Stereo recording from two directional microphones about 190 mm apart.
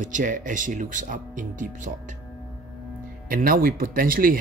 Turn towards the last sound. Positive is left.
turn(degrees=-45)  # may be behind; listen again after turning